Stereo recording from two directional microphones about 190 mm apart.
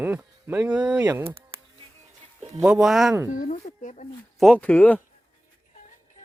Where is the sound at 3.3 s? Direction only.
40° left (ahead or behind).